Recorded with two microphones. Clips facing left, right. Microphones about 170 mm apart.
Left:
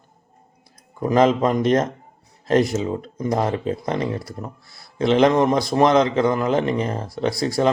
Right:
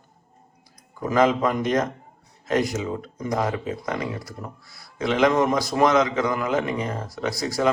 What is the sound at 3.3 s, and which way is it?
A man's voice, 30° left (ahead or behind).